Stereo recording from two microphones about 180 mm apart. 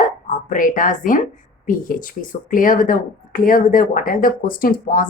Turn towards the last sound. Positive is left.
turn(degrees=50)  # may be behind; listen again after turning